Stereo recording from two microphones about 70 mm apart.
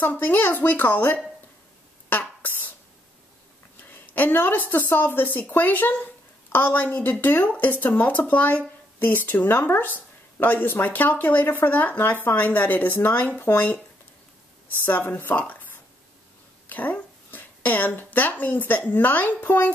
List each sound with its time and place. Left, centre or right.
0.0 s speech: left
2.0 s a sound: left
3.9 s a woman's voice: left